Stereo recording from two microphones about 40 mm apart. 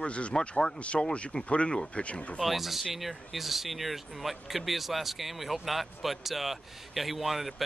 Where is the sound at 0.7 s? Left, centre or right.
Left.